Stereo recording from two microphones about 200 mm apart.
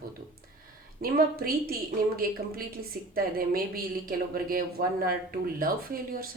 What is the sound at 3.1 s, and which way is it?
A woman's voice, 45° right (ahead or behind).